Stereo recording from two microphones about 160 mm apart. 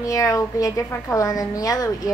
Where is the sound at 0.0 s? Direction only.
20° left (ahead or behind).